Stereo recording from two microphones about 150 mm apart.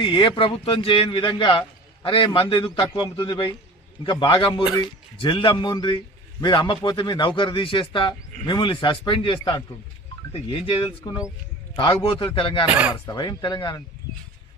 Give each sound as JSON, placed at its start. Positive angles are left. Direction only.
{"t": 0.0, "sound": "a man's voice", "side_deg": 35}